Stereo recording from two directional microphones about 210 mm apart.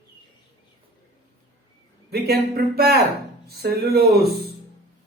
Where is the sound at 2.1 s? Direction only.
50° right (ahead or behind).